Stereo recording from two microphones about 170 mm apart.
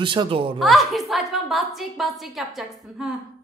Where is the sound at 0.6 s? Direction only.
Centre (ahead or behind).